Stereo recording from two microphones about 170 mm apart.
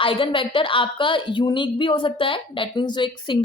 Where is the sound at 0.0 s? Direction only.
30° left (ahead or behind).